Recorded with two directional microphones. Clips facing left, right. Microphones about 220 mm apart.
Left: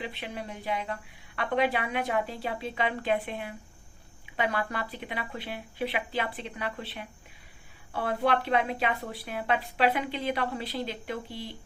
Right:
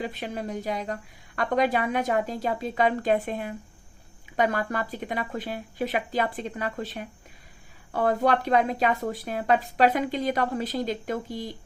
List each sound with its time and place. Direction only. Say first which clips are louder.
0.0 s a woman's voice: right 5 dB; 45° right (ahead or behind)